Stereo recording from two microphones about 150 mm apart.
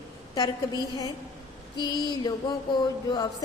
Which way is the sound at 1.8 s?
30° left (ahead or behind).